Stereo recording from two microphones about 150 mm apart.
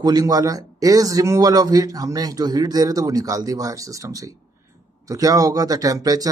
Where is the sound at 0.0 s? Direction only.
25° right (ahead or behind).